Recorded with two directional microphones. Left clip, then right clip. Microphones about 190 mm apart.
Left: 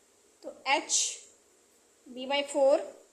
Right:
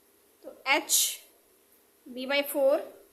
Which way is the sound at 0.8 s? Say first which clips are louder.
Right 2 dB; 20° right (ahead or behind).